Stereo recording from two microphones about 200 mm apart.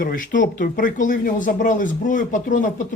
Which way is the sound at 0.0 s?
45° left (ahead or behind).